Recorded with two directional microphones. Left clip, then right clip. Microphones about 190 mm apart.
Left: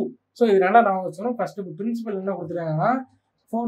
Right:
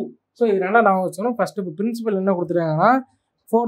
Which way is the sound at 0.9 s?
50° right (ahead or behind).